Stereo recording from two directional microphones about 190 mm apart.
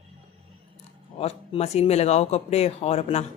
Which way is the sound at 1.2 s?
30° left (ahead or behind).